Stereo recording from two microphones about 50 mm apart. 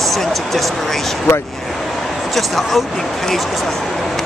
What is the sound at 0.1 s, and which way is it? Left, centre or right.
Speech, centre.